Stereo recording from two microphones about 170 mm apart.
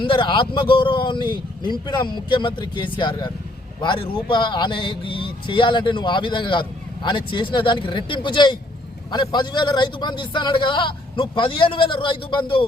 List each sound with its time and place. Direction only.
0.0 s speech: 30° left (ahead or behind)